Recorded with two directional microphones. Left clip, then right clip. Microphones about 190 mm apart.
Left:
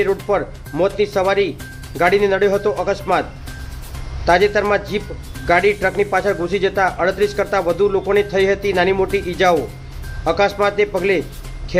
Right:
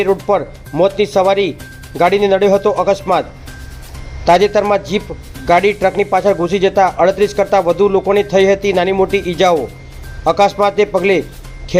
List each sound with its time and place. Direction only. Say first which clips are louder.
0.0 s speech: right 4 dB; 25° right (ahead or behind)
4.3 s speech: right 4 dB; 25° right (ahead or behind)